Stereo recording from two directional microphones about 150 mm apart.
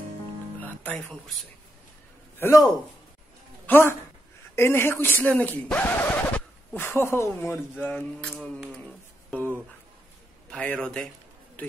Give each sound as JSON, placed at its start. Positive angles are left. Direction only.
{"t": 0.6, "sound": "music", "side_deg": 10}
{"t": 2.3, "sound": "a man's voice", "side_deg": 15}
{"t": 3.6, "sound": "speech", "side_deg": 15}
{"t": 10.5, "sound": "a man's voice", "side_deg": 5}